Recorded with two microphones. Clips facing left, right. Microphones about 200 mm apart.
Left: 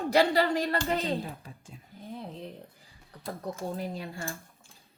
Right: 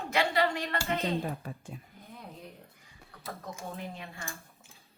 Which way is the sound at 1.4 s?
60° right (ahead or behind).